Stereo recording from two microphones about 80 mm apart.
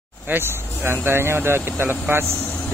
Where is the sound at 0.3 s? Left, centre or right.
Right.